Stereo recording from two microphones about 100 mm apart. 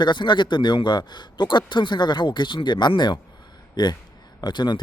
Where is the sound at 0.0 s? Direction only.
50° left (ahead or behind).